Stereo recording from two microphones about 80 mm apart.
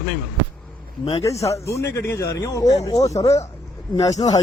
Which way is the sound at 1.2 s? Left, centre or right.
Left.